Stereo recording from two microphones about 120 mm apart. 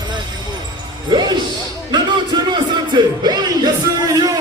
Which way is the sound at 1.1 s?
35° right (ahead or behind).